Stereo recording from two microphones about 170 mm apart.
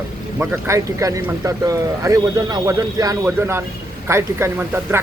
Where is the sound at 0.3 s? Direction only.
15° right (ahead or behind).